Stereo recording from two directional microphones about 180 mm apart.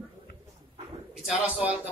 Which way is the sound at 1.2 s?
5° right (ahead or behind).